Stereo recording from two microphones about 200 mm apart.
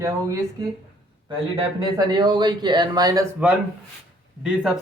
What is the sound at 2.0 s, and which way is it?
Speech, 20° right (ahead or behind).